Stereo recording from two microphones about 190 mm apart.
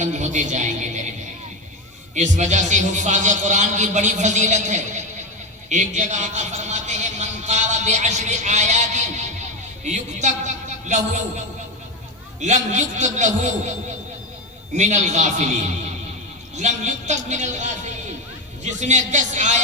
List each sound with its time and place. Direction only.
0.0 s a man's voice: 40° right (ahead or behind)
12.4 s a man's voice: 40° right (ahead or behind)